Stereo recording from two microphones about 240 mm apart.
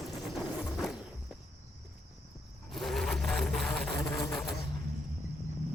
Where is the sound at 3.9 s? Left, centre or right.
Centre.